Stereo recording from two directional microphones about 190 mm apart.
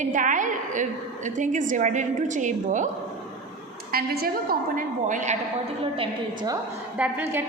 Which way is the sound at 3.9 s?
50° right (ahead or behind).